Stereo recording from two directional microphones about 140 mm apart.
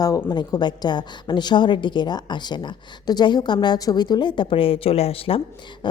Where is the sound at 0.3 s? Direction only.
30° left (ahead or behind).